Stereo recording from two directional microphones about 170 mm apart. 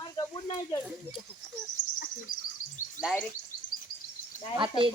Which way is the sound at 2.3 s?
55° left (ahead or behind).